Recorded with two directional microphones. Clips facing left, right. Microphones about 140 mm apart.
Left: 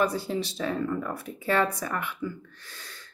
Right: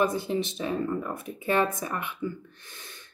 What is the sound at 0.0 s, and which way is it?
Speech, 20° right (ahead or behind).